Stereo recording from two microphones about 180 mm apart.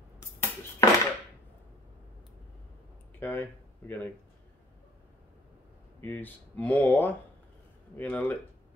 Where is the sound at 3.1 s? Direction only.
10° left (ahead or behind).